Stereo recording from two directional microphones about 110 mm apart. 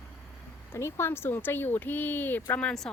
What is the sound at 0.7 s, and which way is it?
Speech, 25° left (ahead or behind).